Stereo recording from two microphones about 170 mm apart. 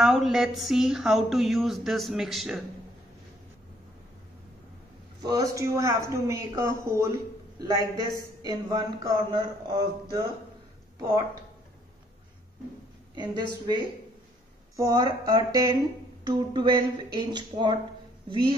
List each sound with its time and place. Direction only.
0.0 s a sound: centre (ahead or behind)
5.2 s a man's voice: 20° right (ahead or behind)
13.1 s a man's voice: 25° right (ahead or behind)